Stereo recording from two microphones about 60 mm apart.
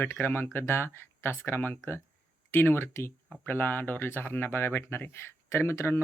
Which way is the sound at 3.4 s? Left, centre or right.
Left.